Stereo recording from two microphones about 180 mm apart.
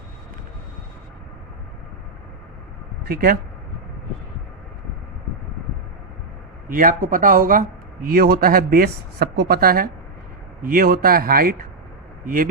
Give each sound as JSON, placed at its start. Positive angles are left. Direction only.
{"t": 6.7, "sound": "speech", "side_deg": -50}